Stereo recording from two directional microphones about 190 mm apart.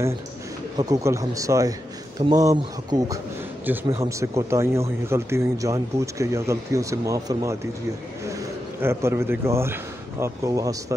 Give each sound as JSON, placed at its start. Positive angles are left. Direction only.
{"t": 0.7, "sound": "speech", "side_deg": -15}
{"t": 8.8, "sound": "speech", "side_deg": -15}